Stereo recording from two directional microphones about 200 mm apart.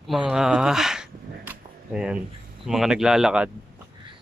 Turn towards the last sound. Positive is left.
turn(degrees=-5)  # may be behind; listen again after turning